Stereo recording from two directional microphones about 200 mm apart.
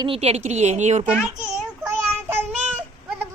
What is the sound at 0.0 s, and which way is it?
A man's voice, 30° right (ahead or behind).